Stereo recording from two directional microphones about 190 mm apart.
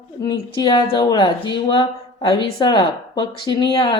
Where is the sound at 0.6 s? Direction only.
25° left (ahead or behind).